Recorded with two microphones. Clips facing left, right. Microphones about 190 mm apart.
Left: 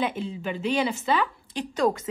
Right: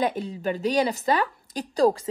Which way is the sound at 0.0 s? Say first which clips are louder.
Right 3 dB; 40° right (ahead or behind).